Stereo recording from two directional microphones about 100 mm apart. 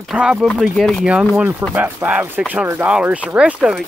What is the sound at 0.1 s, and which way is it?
Speech, 10° right (ahead or behind).